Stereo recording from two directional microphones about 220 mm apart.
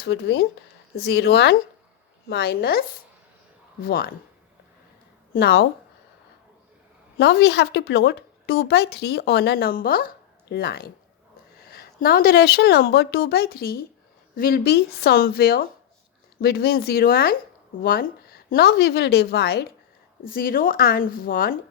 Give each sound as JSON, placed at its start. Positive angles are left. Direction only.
{"t": 0.0, "sound": "a woman's voice", "side_deg": 50}
{"t": 5.3, "sound": "a woman's voice", "side_deg": 45}
{"t": 7.2, "sound": "a woman's voice", "side_deg": 50}